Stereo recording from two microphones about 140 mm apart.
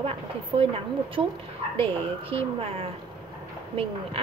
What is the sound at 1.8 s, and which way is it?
A woman's voice, 40° right (ahead or behind).